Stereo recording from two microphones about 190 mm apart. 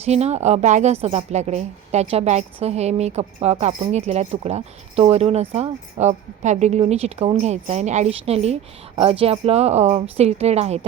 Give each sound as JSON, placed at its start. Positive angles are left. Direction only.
{"t": 0.0, "sound": "a woman's voice", "side_deg": -35}